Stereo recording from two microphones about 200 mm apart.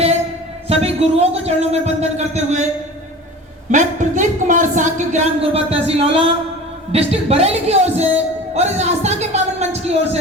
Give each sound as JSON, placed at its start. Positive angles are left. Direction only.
{"t": 0.7, "sound": "a woman's voice", "side_deg": -30}
{"t": 3.7, "sound": "a woman's voice", "side_deg": -40}